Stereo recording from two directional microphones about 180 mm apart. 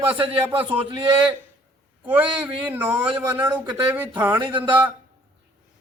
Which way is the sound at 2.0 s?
10° right (ahead or behind).